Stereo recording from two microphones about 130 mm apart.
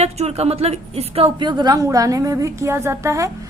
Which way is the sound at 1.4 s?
35° right (ahead or behind).